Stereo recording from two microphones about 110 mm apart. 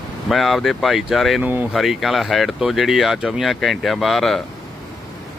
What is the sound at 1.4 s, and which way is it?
Speech, 15° right (ahead or behind).